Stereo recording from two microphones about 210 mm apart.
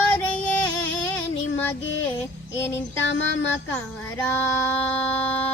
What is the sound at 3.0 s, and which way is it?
Child singing, 65° left (ahead or behind).